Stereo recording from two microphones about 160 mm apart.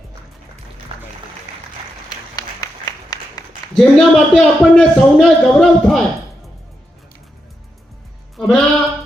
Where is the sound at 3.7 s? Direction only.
Centre (ahead or behind).